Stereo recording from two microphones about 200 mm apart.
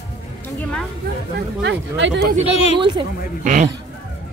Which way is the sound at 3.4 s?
40° right (ahead or behind).